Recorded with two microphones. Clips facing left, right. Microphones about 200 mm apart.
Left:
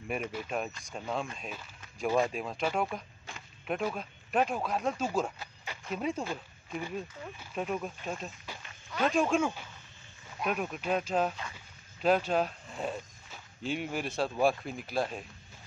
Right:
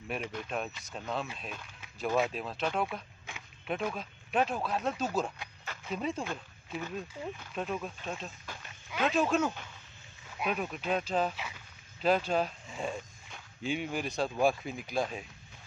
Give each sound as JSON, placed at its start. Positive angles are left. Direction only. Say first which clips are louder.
{"t": 0.3, "sound": "speech", "louder": "left 1 dB", "side_deg": 5}